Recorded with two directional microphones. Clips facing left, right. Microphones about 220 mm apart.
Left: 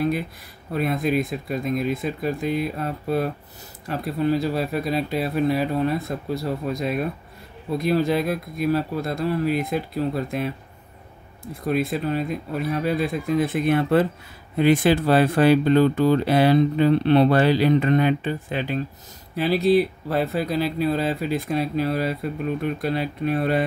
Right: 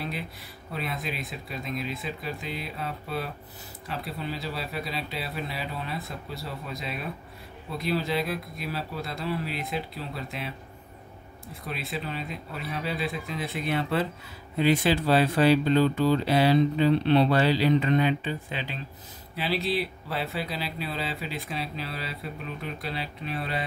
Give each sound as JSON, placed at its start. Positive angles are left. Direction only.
{"t": 0.7, "sound": "speech", "side_deg": 50}
{"t": 11.6, "sound": "speech", "side_deg": 45}